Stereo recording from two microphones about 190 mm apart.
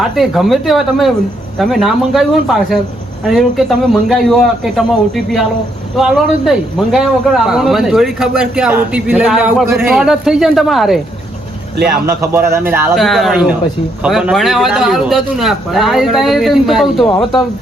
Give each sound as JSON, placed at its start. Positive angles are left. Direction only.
{"t": 0.0, "sound": "a man's voice", "side_deg": 0}
{"t": 6.0, "sound": "a man's voice", "side_deg": 0}
{"t": 12.0, "sound": "a man's voice", "side_deg": -15}
{"t": 12.9, "sound": "a man's voice", "side_deg": 0}